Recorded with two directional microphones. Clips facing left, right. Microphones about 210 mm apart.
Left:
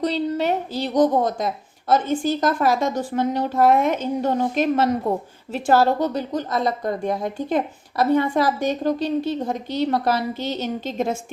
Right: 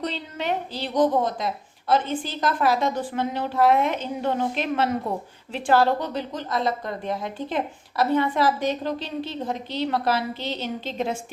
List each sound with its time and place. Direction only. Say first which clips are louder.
0.0 s a woman's voice: left 8 dB; 40° left (ahead or behind)